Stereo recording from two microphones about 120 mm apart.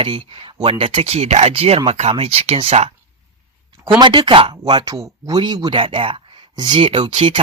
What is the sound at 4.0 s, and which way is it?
Speech, 40° right (ahead or behind).